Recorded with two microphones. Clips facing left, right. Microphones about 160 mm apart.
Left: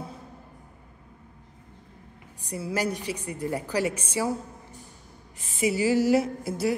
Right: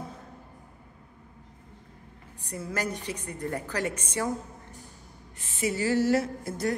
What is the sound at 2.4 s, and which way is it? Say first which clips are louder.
A woman's voice: left 4 dB; 10° left (ahead or behind).